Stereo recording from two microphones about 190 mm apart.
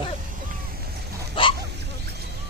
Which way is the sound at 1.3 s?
25° left (ahead or behind).